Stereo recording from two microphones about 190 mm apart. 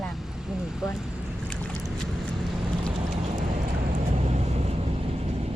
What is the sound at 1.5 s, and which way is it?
Boat, centre (ahead or behind).